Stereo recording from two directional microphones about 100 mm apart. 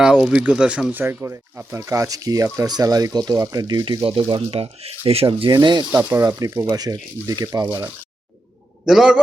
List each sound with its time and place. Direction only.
0.0 s speech: 5° right (ahead or behind); by 3.8 s 40° right (ahead or behind)
4.0 s speech: 60° right (ahead or behind)
4.5 s speech: 80° right
6.0 s speech: 25° right (ahead or behind)
8.9 s a man's voice: 5° right (ahead or behind)